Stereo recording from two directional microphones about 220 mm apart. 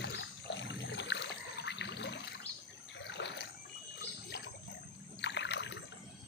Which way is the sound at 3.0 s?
50° left (ahead or behind).